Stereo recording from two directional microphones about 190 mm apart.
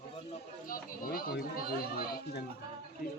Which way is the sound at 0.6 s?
50° left (ahead or behind).